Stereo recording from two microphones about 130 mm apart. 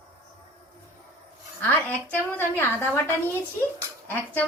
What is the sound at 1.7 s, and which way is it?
A woman's voice, 15° left (ahead or behind).